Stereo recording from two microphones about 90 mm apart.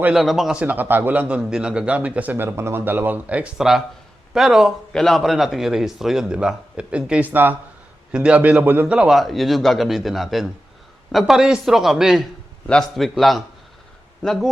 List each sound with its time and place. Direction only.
0.2 s a man's voice: centre (ahead or behind)
0.6 s a man's voice: 20° right (ahead or behind)
1.4 s a man's voice: 10° right (ahead or behind)
9.0 s a man's voice: centre (ahead or behind)